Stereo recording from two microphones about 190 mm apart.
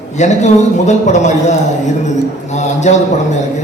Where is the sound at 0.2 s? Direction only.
35° left (ahead or behind).